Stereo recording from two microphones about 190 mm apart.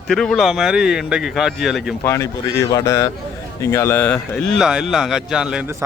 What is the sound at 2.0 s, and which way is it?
A man's voice, 15° left (ahead or behind).